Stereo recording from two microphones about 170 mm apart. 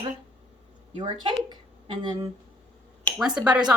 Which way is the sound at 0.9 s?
30° right (ahead or behind).